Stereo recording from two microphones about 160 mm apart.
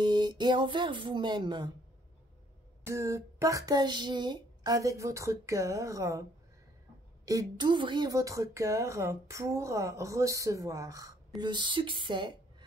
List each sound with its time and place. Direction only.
0.0 s a woman's voice: 30° right (ahead or behind)
2.8 s a woman's voice: 20° right (ahead or behind)
7.2 s a woman's voice: 25° right (ahead or behind)